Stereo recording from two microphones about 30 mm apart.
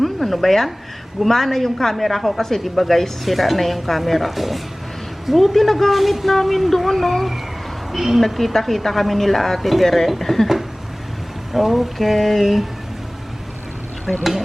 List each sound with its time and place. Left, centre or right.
0.0 s a sound: centre
1.2 s speech: centre
7.9 s speech: centre
11.5 s speech: centre
14.1 s speech: centre